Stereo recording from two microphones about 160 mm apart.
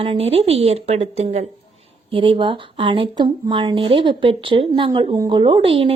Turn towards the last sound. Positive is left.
turn(degrees=-35)  # may be behind; listen again after turning